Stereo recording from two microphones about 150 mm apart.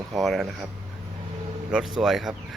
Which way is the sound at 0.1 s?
Centre (ahead or behind).